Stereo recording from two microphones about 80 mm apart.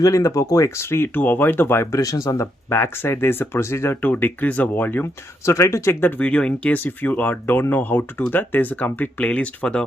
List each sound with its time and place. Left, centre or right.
0.0 s speech: left
2.0 s speech: left
4.0 s speech: left
5.5 s speech: left; by 9.8 s centre